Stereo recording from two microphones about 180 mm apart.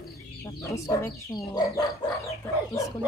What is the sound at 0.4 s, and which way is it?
Speech, 15° left (ahead or behind).